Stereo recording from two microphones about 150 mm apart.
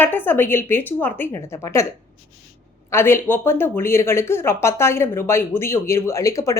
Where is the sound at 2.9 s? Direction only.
15° left (ahead or behind).